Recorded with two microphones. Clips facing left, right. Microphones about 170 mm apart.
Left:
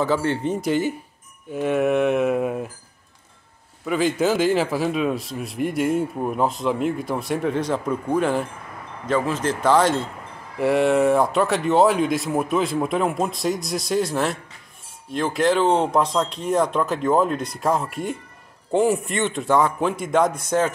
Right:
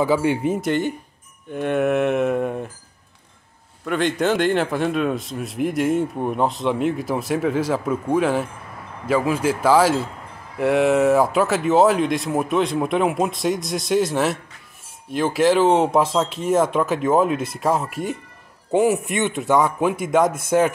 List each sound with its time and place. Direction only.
0.0 s a man's voice: 10° right (ahead or behind)
3.8 s a man's voice: 5° left (ahead or behind)
19.0 s a man's voice: 15° right (ahead or behind)